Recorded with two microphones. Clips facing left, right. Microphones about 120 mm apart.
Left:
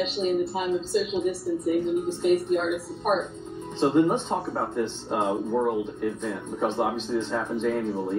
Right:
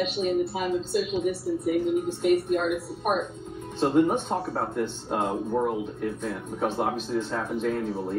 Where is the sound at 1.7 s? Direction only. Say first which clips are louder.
Even; 5° right (ahead or behind).